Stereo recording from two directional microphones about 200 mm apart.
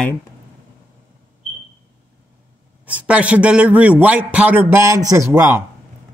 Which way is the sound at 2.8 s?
5° right (ahead or behind).